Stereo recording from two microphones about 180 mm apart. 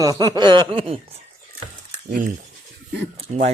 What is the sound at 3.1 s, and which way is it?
Speech, 35° right (ahead or behind).